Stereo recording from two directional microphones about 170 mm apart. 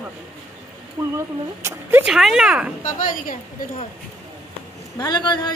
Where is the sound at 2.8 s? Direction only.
50° left (ahead or behind).